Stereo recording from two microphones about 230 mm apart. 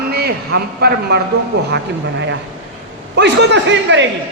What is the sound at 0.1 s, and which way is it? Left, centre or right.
A man's voice, right.